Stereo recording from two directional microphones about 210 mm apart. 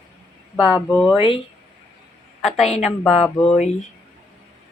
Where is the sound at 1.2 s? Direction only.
25° left (ahead or behind).